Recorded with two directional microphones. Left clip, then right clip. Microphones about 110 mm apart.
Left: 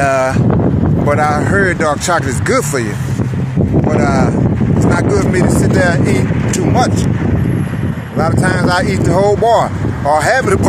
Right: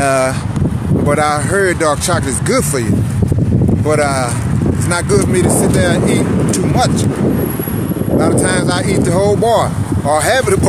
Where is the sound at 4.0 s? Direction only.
20° left (ahead or behind).